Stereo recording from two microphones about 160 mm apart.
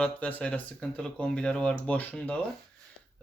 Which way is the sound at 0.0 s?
10° left (ahead or behind).